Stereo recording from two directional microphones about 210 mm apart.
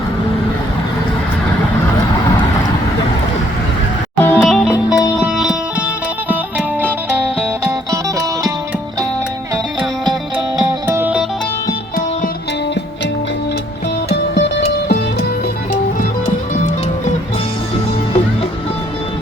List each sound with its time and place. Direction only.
4.2 s music: 10° left (ahead or behind)
10.3 s music: 10° right (ahead or behind)
14.1 s music: 50° left (ahead or behind)